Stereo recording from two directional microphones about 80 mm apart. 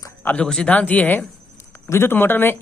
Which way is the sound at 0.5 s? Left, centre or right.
Centre.